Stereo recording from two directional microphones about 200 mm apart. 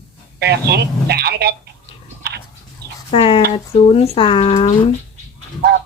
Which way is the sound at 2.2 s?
55° right (ahead or behind).